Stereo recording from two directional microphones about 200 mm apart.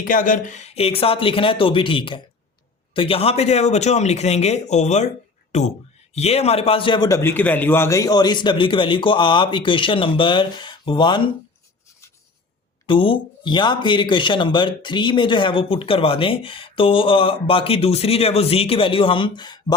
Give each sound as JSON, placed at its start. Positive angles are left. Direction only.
{"t": 0.0, "sound": "speech", "side_deg": 40}
{"t": 12.8, "sound": "speech", "side_deg": 25}